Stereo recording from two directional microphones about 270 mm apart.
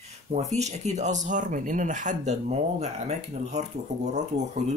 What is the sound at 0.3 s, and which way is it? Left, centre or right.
Speech, right.